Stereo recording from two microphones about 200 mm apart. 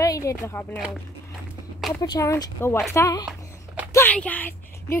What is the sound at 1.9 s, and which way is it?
Speech, 15° left (ahead or behind).